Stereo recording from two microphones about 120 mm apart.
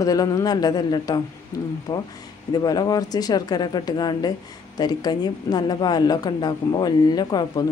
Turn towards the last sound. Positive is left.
turn(degrees=35)  # may be behind; listen again after turning